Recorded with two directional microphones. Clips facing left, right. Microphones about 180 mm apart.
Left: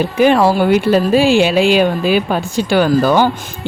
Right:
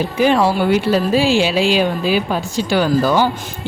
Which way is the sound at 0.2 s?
55° left (ahead or behind).